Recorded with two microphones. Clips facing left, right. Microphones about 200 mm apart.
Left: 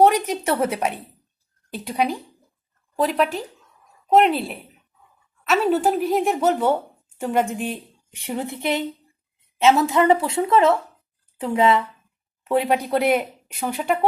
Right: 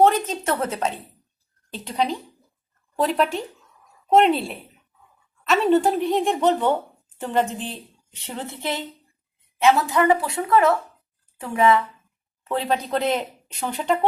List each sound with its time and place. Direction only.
0.3 s a woman's voice: 10° left (ahead or behind)